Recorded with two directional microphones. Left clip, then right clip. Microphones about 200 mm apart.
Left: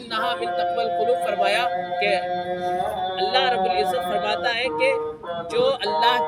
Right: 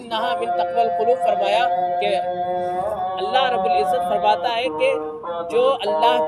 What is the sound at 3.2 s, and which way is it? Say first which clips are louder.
Speech: right 1 dB; 20° left (ahead or behind).